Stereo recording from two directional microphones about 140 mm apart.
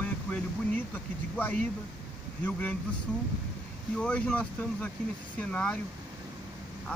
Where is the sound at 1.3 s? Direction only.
15° left (ahead or behind).